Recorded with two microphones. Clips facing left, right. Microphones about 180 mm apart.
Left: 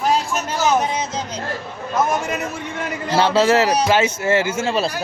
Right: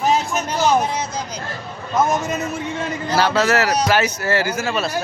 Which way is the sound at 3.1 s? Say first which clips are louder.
Left 2 dB; 25° left (ahead or behind).